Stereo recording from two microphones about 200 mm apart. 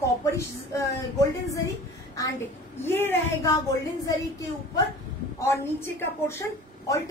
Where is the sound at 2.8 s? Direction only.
10° left (ahead or behind).